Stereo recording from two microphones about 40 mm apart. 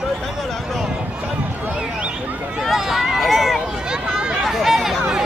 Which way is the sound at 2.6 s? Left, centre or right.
Centre.